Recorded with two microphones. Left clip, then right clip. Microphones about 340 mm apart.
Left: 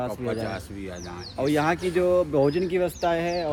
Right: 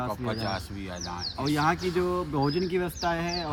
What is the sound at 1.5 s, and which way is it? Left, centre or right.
Speech, centre.